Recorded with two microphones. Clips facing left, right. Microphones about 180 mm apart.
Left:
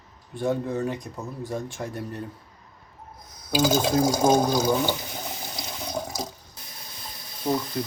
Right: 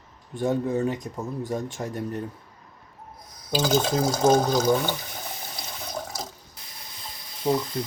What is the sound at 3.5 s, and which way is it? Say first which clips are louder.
Speech: left 1 dB; 10° left (ahead or behind).